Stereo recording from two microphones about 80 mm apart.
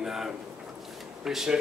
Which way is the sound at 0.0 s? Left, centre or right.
Centre.